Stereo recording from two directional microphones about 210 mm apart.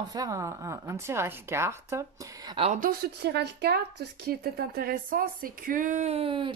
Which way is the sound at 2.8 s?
45° right (ahead or behind).